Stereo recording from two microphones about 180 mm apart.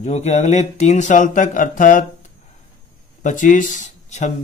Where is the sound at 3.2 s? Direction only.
45° left (ahead or behind).